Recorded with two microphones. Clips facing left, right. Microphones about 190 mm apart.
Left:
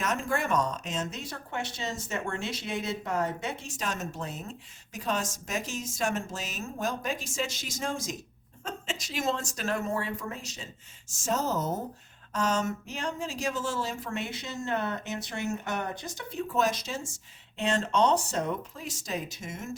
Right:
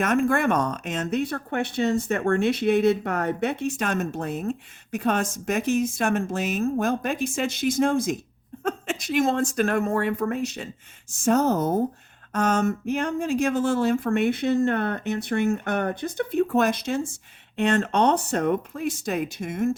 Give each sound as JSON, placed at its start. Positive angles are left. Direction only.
{"t": 0.0, "sound": "speech", "side_deg": -60}